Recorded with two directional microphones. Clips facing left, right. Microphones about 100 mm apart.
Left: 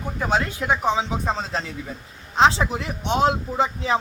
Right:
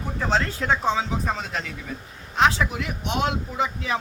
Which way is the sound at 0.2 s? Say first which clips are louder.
Left 1 dB; 10° left (ahead or behind).